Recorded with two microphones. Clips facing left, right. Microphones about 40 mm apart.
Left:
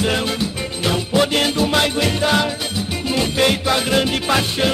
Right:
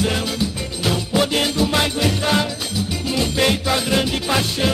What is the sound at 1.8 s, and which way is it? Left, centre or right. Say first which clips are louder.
Music: left 2 dB; centre.